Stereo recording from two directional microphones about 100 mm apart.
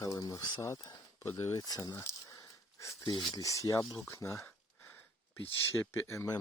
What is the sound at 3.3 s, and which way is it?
Speech, 35° left (ahead or behind).